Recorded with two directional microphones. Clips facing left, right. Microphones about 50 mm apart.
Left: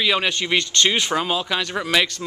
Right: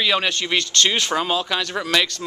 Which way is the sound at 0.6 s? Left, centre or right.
Left.